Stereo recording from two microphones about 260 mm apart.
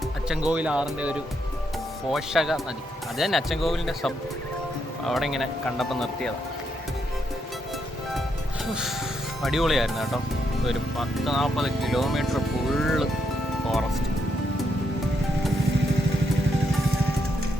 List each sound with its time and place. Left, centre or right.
0.3 s speech: centre
9.4 s speech: centre
13.7 s music: centre